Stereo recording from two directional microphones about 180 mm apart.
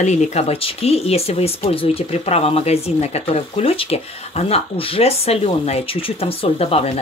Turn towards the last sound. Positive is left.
turn(degrees=35)  # may be behind; listen again after turning